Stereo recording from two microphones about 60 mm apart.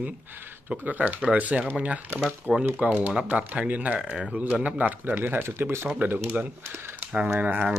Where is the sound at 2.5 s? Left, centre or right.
Centre.